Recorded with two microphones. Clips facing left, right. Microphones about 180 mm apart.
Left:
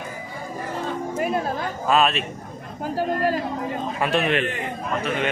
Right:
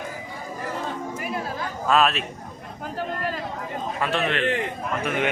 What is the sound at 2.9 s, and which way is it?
Speech, 40° left (ahead or behind).